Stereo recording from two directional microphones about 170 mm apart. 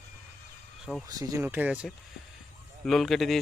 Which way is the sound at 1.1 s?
20° right (ahead or behind).